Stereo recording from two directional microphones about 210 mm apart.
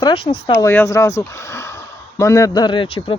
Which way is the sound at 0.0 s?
25° left (ahead or behind).